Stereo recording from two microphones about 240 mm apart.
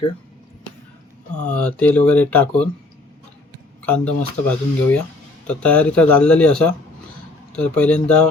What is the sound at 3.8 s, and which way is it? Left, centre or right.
Speech, centre.